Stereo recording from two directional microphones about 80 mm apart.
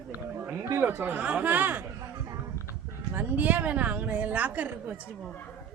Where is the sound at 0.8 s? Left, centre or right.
Right.